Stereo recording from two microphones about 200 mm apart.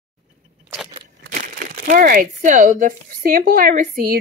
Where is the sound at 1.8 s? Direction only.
45° right (ahead or behind).